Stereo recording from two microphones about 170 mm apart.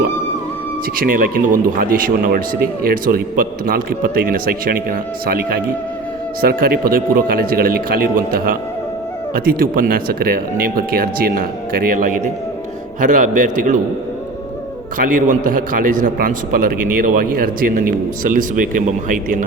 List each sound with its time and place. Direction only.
0.9 s a man's voice: 60° right (ahead or behind)
14.9 s a man's voice: 50° right (ahead or behind)